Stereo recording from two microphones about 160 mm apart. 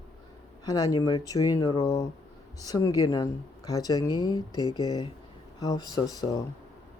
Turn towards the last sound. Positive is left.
turn(degrees=25)  # may be behind; listen again after turning